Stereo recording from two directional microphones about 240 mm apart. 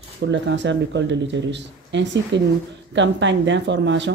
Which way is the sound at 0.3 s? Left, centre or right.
Right.